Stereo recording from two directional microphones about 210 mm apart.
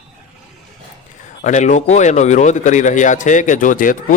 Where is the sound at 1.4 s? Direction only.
35° left (ahead or behind).